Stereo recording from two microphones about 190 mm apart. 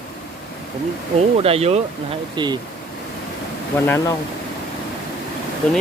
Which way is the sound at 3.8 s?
10° left (ahead or behind).